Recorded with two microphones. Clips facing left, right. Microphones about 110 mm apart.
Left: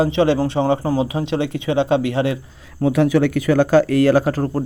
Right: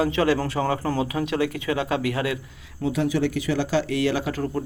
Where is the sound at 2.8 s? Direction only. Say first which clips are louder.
Left 7 dB; 60° left (ahead or behind); by 4.6 s 40° left (ahead or behind).